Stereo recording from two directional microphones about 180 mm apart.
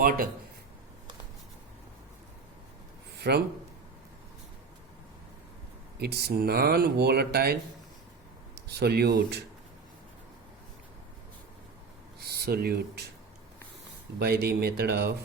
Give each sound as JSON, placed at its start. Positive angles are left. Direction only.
{"t": 0.0, "sound": "a man's voice", "side_deg": -50}
{"t": 3.2, "sound": "a man's voice", "side_deg": -65}
{"t": 6.0, "sound": "speech", "side_deg": -60}
{"t": 8.6, "sound": "speech", "side_deg": -65}
{"t": 12.2, "sound": "speech", "side_deg": -60}
{"t": 14.2, "sound": "speech", "side_deg": -60}